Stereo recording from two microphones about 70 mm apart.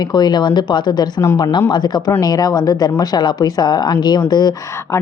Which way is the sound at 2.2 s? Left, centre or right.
Left.